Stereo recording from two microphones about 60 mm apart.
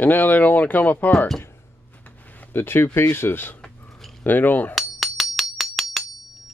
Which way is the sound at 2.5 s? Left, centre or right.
Left.